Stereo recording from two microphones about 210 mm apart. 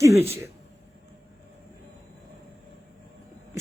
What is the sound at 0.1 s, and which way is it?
Speech, 30° right (ahead or behind).